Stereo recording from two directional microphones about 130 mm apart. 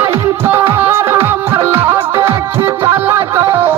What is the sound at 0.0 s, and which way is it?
Music, 15° right (ahead or behind).